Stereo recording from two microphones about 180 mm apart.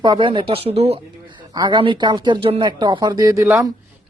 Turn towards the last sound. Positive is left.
turn(degrees=-15)  # may be behind; listen again after turning